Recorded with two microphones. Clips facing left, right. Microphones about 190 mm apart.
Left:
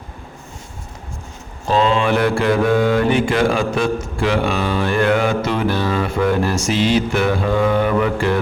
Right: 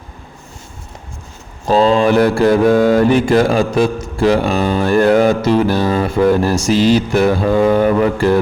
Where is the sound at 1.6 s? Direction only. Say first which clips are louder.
Right 5 dB; 35° right (ahead or behind).